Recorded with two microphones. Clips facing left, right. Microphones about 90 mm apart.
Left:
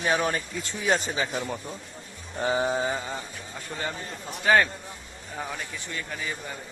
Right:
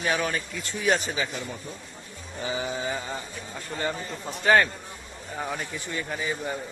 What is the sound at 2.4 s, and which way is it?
Sheep, 55° left (ahead or behind).